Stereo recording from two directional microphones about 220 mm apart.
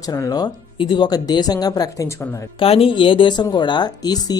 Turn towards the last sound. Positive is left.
turn(degrees=20)  # may be behind; listen again after turning